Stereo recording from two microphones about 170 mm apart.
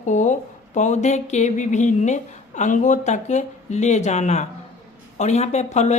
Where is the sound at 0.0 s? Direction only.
45° left (ahead or behind).